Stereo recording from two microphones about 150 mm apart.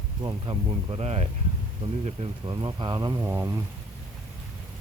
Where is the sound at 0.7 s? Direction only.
40° right (ahead or behind).